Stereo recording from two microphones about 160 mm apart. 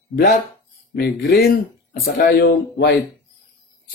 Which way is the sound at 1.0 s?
80° left.